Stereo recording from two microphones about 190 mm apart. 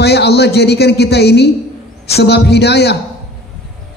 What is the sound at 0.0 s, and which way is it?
A man's voice, 60° left (ahead or behind).